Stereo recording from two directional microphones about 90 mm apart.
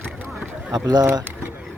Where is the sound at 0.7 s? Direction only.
45° right (ahead or behind).